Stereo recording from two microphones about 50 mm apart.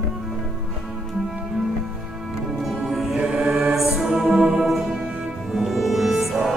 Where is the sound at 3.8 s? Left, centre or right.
Centre.